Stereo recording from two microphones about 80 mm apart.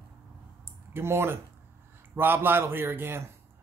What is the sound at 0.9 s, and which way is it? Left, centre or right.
Speech, right.